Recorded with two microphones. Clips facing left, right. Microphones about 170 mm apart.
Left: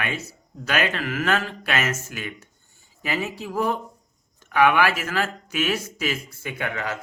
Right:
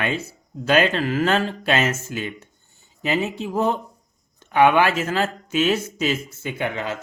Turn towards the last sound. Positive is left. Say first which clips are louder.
# right 3 dB
turn(degrees=-25)  # may be behind; listen again after turning